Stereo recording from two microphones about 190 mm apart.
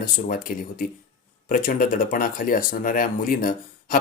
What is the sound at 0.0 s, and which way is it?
Speech, 45° left (ahead or behind).